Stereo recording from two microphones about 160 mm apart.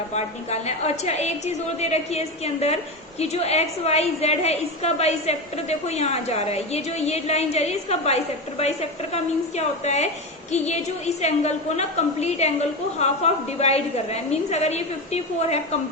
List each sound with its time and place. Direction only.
0.1 s a woman's voice: 45° left (ahead or behind)